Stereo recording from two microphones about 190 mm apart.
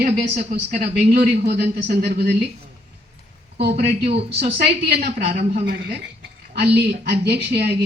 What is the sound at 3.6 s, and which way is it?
A man's voice, 55° right (ahead or behind).